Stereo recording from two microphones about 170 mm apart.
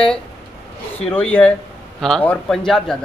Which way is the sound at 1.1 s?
10° left (ahead or behind).